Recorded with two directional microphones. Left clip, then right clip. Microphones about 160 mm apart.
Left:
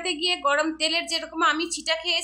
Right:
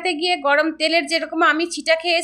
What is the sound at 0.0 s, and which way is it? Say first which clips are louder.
A woman's voice: right 4 dB; 25° right (ahead or behind).